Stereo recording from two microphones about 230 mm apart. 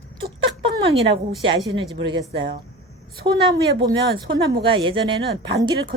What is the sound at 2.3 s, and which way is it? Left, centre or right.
Speech, right.